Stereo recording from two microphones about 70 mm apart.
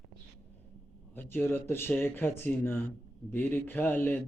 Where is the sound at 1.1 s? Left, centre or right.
Left.